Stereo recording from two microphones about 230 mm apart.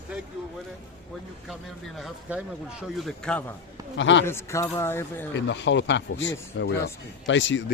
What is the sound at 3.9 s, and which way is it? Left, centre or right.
Speech, left.